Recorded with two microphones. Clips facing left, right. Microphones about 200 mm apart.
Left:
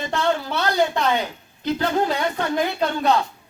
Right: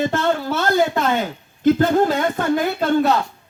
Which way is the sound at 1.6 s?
50° right (ahead or behind).